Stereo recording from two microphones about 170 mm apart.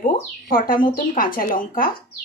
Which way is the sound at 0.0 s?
55° left (ahead or behind).